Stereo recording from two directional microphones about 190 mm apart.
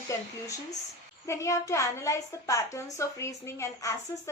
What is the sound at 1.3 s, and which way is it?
A woman's voice, 15° left (ahead or behind).